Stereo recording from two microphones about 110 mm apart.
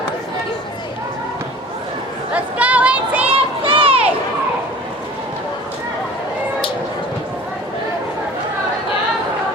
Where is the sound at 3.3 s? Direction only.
55° right (ahead or behind).